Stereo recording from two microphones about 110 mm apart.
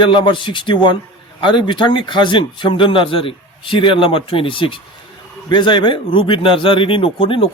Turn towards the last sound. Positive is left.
turn(degrees=55)  # may be behind; listen again after turning